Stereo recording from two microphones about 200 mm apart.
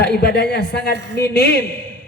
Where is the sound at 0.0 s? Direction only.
55° left (ahead or behind).